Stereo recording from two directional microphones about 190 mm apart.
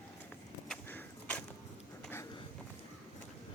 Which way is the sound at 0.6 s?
5° left (ahead or behind).